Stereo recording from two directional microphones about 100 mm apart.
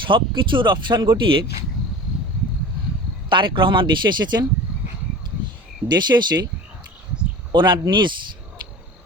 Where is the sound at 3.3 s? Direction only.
55° right (ahead or behind).